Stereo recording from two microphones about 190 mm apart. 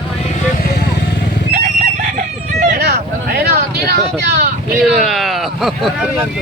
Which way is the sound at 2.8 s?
55° right (ahead or behind).